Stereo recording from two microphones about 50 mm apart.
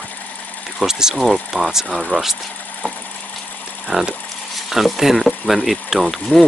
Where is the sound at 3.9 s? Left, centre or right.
Centre.